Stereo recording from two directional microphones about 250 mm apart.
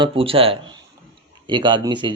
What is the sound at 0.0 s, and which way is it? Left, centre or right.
Speech, right.